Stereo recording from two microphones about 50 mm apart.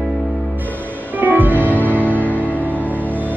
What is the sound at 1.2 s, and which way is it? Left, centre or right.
Music, right.